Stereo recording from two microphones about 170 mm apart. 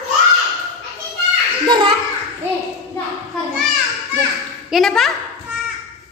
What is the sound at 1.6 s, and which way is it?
Speech, 25° right (ahead or behind).